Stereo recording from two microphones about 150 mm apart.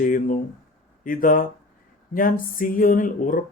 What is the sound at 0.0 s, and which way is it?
Speech, 65° left (ahead or behind).